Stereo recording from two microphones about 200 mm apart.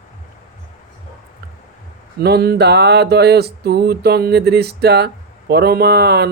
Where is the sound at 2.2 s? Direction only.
55° right (ahead or behind).